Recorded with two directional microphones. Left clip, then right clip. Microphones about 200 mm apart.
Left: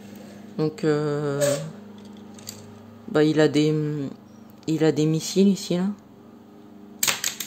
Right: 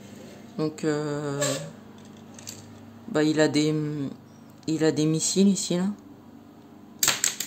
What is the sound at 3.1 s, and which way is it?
Speech, 10° left (ahead or behind).